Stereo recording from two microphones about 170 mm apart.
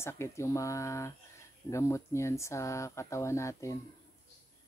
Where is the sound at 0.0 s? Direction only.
15° left (ahead or behind).